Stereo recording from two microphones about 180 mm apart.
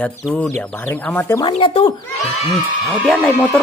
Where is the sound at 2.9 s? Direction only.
5° left (ahead or behind).